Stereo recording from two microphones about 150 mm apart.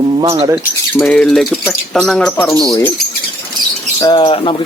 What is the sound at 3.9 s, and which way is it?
Speech, 30° left (ahead or behind).